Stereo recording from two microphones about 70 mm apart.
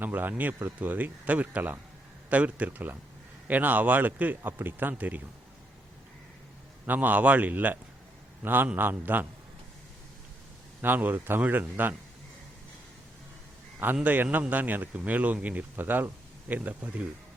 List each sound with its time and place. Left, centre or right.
0.0 s speech: right
6.8 s speech: right
10.8 s speech: right
13.9 s speech: right